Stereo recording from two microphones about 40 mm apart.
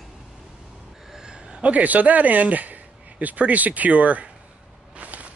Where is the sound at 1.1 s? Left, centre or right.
Centre.